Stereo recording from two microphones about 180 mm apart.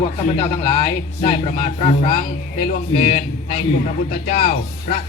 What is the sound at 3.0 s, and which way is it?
Speech, 50° left (ahead or behind).